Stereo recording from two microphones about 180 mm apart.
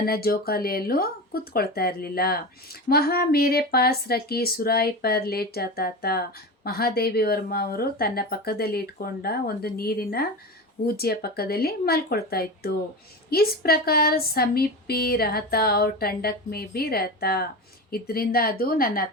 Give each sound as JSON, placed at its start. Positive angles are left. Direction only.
{"t": 0.0, "sound": "speech", "side_deg": 55}